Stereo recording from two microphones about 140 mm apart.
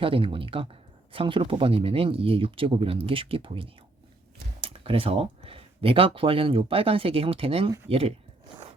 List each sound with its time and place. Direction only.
0.0 s speech: 40° right (ahead or behind)